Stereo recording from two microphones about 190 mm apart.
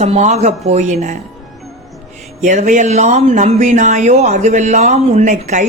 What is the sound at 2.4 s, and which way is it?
Speech, 40° right (ahead or behind).